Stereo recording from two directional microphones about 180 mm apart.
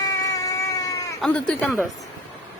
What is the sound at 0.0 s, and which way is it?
Cat, 20° left (ahead or behind).